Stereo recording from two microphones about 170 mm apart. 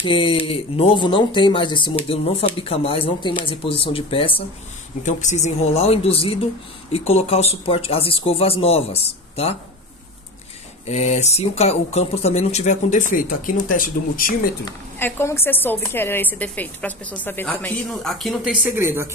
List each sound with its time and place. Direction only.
0.0 s speech: 30° left (ahead or behind)
5.0 s speech: 45° left (ahead or behind)
10.9 s speech: 40° left (ahead or behind); by 14.5 s 60° left (ahead or behind)
14.6 s a woman's voice: 15° left (ahead or behind); by 19.0 s 15° right (ahead or behind)